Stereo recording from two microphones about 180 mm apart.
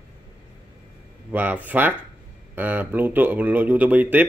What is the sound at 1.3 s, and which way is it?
Speech, 10° right (ahead or behind).